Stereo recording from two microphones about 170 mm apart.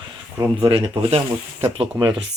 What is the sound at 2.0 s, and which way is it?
Speech, 20° right (ahead or behind).